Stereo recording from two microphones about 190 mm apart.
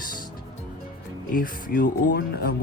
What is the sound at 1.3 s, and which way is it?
Speech, 45° left (ahead or behind).